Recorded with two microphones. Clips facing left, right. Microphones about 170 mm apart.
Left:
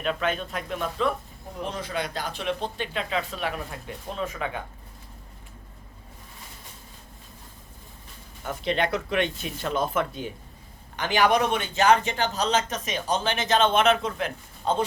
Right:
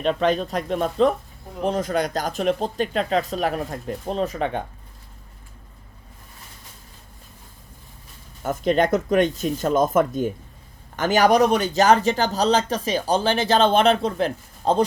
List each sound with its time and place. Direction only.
0.0 s a man's voice: 35° right (ahead or behind)
1.6 s a man's voice: 45° right (ahead or behind)
8.4 s a man's voice: 45° right (ahead or behind)